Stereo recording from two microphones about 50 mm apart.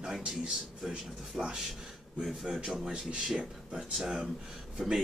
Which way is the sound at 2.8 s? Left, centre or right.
Centre.